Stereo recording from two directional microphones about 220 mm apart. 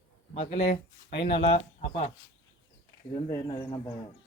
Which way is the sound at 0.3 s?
25° left (ahead or behind).